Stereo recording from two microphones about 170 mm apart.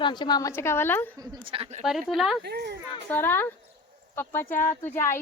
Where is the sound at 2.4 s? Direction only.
75° right (ahead or behind).